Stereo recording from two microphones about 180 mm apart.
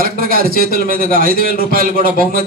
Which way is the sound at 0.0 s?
55° right (ahead or behind).